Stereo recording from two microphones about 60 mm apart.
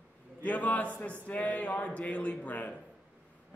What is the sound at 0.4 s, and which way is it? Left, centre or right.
A man's voice, left.